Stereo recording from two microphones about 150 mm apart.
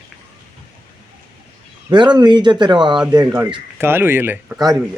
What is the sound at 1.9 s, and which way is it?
Speech, 30° right (ahead or behind).